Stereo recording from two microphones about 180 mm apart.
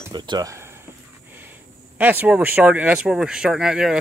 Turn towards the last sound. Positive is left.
turn(degrees=-5)  # may be behind; listen again after turning